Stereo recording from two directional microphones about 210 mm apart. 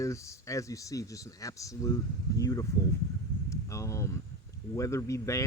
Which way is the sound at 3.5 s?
15° left (ahead or behind).